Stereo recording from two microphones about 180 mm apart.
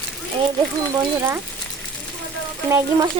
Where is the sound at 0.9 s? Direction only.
15° right (ahead or behind).